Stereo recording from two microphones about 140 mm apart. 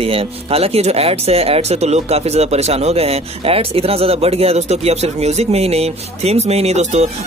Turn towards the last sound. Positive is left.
turn(degrees=-50)  # may be behind; listen again after turning